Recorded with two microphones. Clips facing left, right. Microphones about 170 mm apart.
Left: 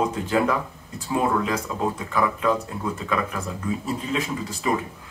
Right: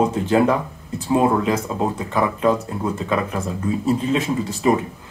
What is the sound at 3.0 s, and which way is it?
Speech, 35° right (ahead or behind).